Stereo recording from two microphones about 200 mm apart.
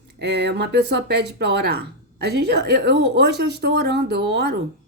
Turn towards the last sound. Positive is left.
turn(degrees=-55)  # may be behind; listen again after turning